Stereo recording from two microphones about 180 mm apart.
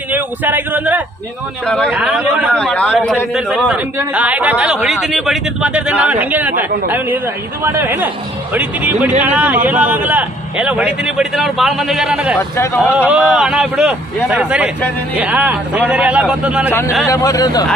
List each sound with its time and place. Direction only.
0.1 s a man's voice: 10° right (ahead or behind)
2.5 s a man's voice: 5° left (ahead or behind)
3.3 s a man's voice: 5° right (ahead or behind)
17.0 s speech: 20° left (ahead or behind)